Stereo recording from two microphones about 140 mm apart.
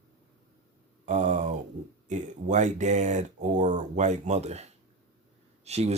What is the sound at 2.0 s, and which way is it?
Speech, 60° right (ahead or behind).